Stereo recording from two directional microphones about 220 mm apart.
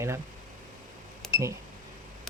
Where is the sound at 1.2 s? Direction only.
Centre (ahead or behind).